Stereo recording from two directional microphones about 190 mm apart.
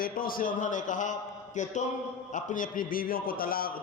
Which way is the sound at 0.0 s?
50° left (ahead or behind).